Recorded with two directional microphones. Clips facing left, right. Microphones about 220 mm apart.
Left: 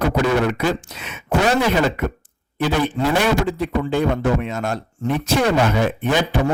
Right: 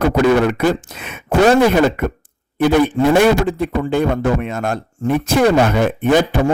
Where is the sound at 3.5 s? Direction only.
55° right (ahead or behind).